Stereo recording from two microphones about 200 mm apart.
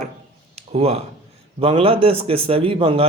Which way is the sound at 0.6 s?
30° right (ahead or behind).